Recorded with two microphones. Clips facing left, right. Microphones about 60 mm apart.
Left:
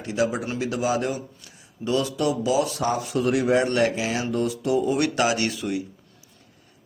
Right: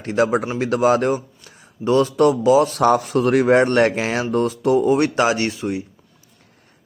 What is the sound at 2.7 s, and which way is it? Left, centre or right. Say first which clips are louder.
Speech: right 9 dB; right.